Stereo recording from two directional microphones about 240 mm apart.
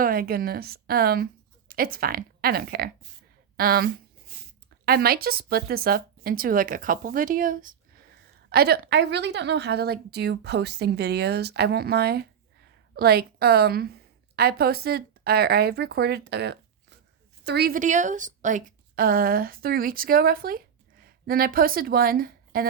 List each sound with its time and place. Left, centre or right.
0.0 s speech: right
4.9 s speech: right